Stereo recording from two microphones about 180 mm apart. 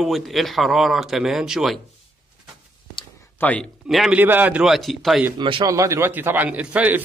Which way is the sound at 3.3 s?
10° left (ahead or behind).